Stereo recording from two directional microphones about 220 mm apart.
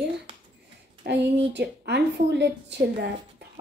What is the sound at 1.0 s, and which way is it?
A woman's voice, 50° right (ahead or behind).